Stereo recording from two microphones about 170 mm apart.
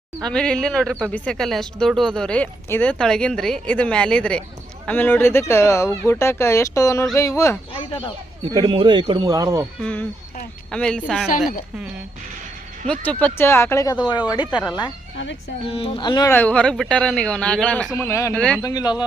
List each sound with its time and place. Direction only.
0.2 s speech: 5° left (ahead or behind)
7.7 s speech: 30° left (ahead or behind)
8.5 s a man's voice: 30° right (ahead or behind)
9.8 s speech: 10° left (ahead or behind)
12.9 s speech: 10° left (ahead or behind); by 14.6 s 25° left (ahead or behind)
15.6 s speech: 35° left (ahead or behind)
16.3 s speech: 10° left (ahead or behind)
18.6 s speech: 25° left (ahead or behind)